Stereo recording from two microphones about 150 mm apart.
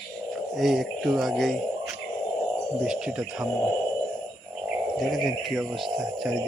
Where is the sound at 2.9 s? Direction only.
5° right (ahead or behind).